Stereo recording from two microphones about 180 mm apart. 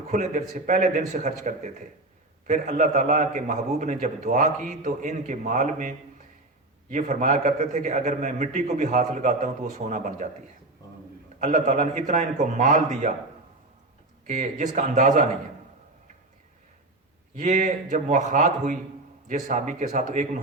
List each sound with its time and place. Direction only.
0.1 s a man's voice: 40° right (ahead or behind)
6.9 s a man's voice: 45° right (ahead or behind)
11.3 s a man's voice: 45° right (ahead or behind)
14.3 s a man's voice: 45° right (ahead or behind)
17.3 s a man's voice: 45° right (ahead or behind)